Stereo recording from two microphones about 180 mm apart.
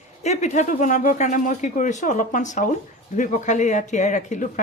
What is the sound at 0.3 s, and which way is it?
A woman's voice, 40° left (ahead or behind).